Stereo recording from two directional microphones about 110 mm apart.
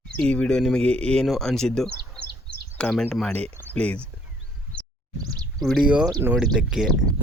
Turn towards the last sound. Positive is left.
turn(degrees=-5)  # may be behind; listen again after turning